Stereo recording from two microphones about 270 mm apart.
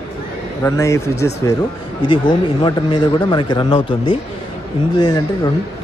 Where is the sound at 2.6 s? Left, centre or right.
Centre.